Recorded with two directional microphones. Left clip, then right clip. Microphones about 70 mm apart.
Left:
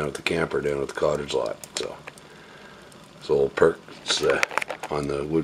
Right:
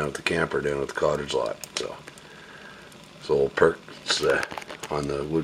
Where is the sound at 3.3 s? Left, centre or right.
Centre.